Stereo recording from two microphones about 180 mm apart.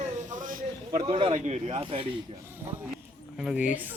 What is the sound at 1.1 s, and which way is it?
Speech, 30° right (ahead or behind).